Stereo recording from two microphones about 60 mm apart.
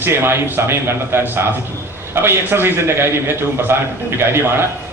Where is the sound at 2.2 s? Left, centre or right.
Right.